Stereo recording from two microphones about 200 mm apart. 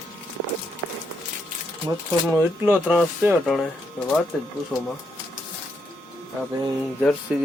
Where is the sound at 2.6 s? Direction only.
10° right (ahead or behind).